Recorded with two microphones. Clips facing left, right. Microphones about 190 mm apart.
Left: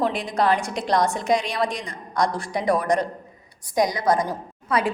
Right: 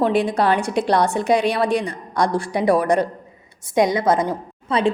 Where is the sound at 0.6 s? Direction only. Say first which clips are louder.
Right 7 dB; 60° right (ahead or behind).